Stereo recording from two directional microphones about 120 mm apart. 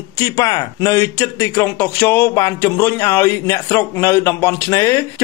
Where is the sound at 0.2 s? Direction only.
30° left (ahead or behind).